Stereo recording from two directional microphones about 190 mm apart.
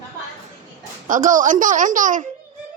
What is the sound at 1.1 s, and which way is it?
Speech, 45° right (ahead or behind).